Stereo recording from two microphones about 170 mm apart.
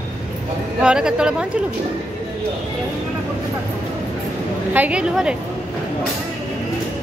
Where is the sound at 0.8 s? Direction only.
5° right (ahead or behind).